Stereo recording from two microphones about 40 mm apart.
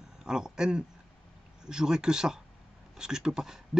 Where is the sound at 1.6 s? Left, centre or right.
Centre.